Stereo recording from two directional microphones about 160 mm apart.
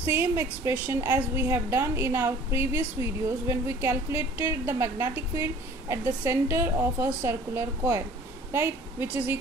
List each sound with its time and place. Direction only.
0.0 s a woman's voice: 15° right (ahead or behind)